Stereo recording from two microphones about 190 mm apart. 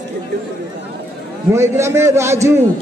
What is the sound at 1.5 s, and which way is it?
A man's voice, 15° right (ahead or behind).